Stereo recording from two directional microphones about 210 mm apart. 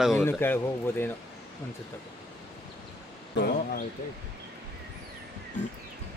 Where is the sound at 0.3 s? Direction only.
10° left (ahead or behind).